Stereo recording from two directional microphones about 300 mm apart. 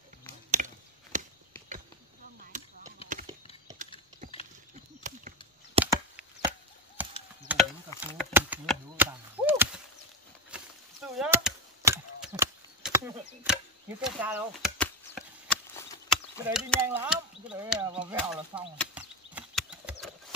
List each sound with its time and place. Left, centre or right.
0.6 s chop: right
1.1 s a sound: right
2.4 s chop: right
3.1 s clip-clop: right
5.8 s chop: centre
7.0 s chop: centre
7.5 s a sound: centre
8.2 s chop: centre
10.5 s a sound: centre
14.0 s chop: centre
16.4 s speech: centre